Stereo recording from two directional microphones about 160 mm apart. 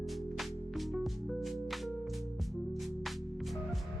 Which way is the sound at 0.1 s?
Centre (ahead or behind).